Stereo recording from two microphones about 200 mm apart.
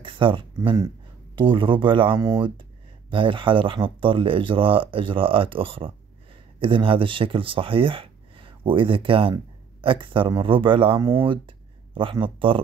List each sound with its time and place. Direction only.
0.0 s speech: 25° right (ahead or behind)